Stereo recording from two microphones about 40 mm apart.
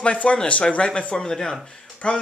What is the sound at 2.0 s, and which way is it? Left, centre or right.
Speech, left.